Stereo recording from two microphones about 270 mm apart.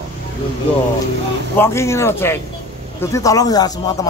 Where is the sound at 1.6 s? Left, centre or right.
Centre.